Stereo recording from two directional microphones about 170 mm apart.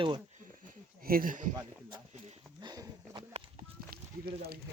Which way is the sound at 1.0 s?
55° right (ahead or behind).